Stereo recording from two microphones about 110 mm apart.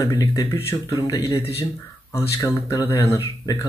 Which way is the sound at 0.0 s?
30° left (ahead or behind).